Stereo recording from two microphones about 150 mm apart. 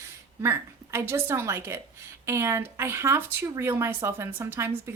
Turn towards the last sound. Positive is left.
turn(degrees=-15)  # may be behind; listen again after turning